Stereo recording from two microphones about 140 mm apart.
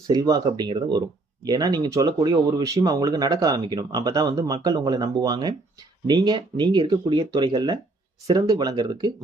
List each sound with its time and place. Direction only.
0.1 s speech: 25° right (ahead or behind)